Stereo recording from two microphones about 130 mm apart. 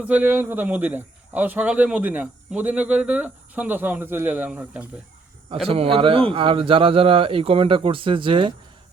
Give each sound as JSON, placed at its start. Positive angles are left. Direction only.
{"t": 0.0, "sound": "a man's voice", "side_deg": -10}
{"t": 5.6, "sound": "a man's voice", "side_deg": -50}